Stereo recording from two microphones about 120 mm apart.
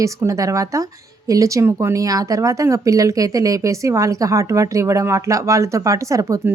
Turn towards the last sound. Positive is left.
turn(degrees=-25)  # may be behind; listen again after turning